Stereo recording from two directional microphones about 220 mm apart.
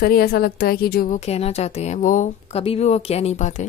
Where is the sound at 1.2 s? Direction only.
30° left (ahead or behind).